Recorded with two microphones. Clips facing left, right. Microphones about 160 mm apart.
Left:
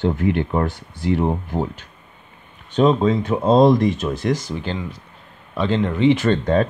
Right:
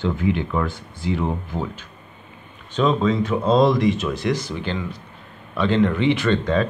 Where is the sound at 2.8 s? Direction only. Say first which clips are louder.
Left 3 dB; 45° left (ahead or behind).